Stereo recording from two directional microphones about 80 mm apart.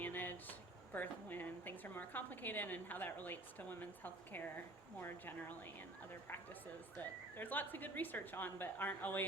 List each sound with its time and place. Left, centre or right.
0.0 s a sound: left
0.9 s a woman's voice: left
6.9 s a woman's voice: left